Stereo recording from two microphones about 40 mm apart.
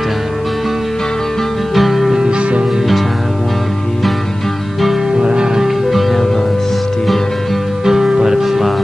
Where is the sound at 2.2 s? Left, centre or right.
Right.